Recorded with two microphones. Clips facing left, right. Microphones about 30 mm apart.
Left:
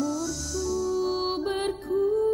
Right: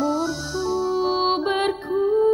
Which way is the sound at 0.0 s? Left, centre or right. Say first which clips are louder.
Right 6 dB; right.